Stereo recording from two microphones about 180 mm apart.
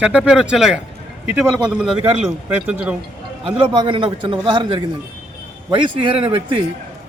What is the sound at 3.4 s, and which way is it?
A man's voice, 25° right (ahead or behind).